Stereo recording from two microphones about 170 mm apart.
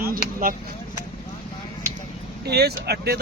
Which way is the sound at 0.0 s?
60° right (ahead or behind).